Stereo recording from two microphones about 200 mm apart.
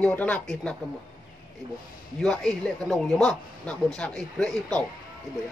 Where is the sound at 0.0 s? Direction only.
5° left (ahead or behind).